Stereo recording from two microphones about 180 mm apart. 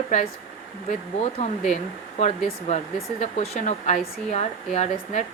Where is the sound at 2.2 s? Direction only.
40° left (ahead or behind).